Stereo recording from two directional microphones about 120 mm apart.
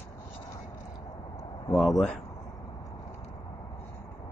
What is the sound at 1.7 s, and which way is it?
Speech, centre (ahead or behind).